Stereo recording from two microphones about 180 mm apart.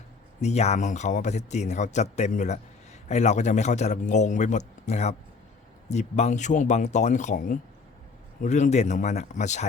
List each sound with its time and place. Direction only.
0.4 s speech: 40° left (ahead or behind)